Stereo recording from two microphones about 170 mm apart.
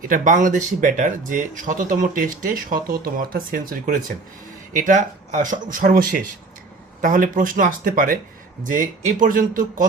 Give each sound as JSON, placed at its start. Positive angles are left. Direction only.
{"t": 0.1, "sound": "speech", "side_deg": -50}